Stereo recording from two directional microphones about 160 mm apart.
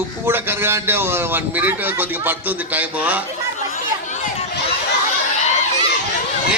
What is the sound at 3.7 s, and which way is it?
Chatter, 50° left (ahead or behind).